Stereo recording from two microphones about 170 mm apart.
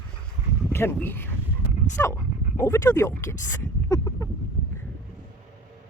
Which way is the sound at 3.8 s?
20° left (ahead or behind).